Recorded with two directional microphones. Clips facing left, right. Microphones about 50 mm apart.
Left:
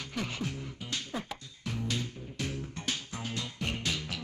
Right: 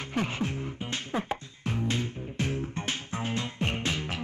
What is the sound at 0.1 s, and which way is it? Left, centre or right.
Music, right.